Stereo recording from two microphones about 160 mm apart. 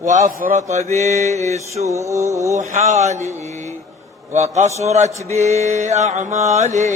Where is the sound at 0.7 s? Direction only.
45° right (ahead or behind).